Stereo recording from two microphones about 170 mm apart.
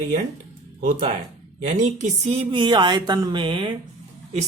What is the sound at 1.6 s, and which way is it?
Speech, 45° right (ahead or behind).